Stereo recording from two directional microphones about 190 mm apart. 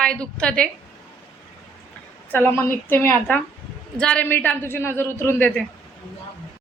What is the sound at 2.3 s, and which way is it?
A woman's voice, 10° left (ahead or behind).